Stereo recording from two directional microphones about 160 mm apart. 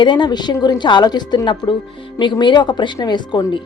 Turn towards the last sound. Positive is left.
turn(degrees=25)  # may be behind; listen again after turning